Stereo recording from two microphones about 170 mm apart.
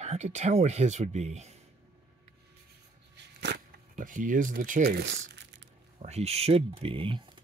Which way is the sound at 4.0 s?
50° right (ahead or behind).